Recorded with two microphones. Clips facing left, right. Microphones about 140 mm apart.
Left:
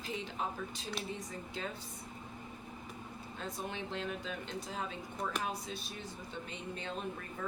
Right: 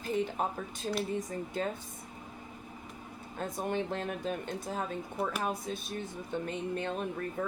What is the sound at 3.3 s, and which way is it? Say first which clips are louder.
Speech: right 8 dB; 50° right (ahead or behind).